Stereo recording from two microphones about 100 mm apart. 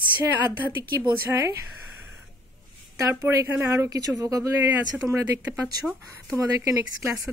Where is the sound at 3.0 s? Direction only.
30° right (ahead or behind).